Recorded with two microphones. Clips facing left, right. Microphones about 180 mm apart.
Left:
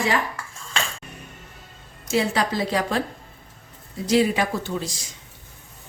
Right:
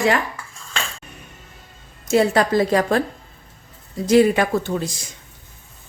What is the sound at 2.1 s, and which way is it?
Speech, 50° right (ahead or behind).